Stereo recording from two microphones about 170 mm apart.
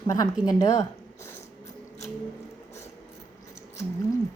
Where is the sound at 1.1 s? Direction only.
15° left (ahead or behind).